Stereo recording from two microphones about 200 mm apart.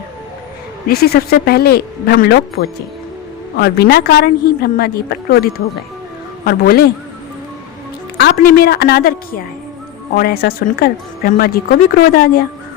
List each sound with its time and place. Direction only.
0.9 s speech: 50° left (ahead or behind)
8.2 s speech: 45° left (ahead or behind)